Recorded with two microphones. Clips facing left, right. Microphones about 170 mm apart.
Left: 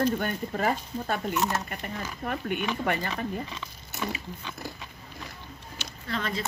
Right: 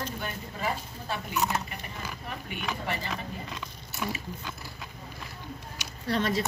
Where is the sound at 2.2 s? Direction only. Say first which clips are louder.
Left 8 dB; 50° left (ahead or behind).